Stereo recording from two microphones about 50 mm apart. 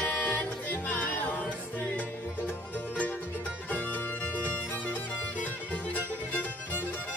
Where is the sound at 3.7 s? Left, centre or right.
Left.